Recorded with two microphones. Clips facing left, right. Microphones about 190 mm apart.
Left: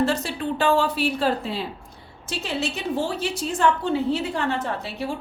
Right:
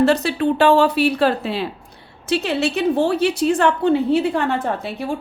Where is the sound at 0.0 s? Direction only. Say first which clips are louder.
Right 7 dB; 70° right (ahead or behind).